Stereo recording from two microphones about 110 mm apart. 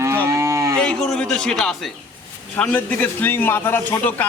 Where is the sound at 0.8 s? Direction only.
5° left (ahead or behind).